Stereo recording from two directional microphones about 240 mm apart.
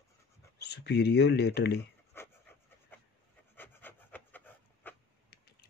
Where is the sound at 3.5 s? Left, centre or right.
Centre.